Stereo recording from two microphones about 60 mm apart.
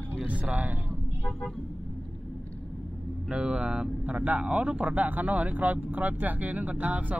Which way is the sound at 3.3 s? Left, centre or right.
Right.